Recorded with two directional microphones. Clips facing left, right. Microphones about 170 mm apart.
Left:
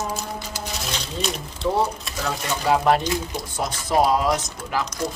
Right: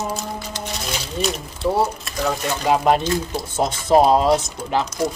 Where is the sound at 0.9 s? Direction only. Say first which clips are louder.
Right 5 dB; centre (ahead or behind).